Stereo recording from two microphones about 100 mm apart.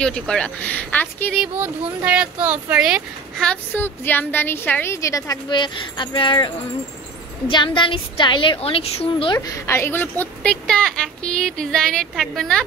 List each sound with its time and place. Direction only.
0.0 s speech: 10° left (ahead or behind)
1.6 s speech: 15° right (ahead or behind)
3.7 s a woman's voice: 20° left (ahead or behind)
4.9 s a woman's voice: 30° left (ahead or behind)
5.5 s a woman's voice: 50° left (ahead or behind)
8.5 s a woman's voice: 75° left (ahead or behind)
9.5 s speech: 25° left (ahead or behind); by 12.6 s 5° left (ahead or behind)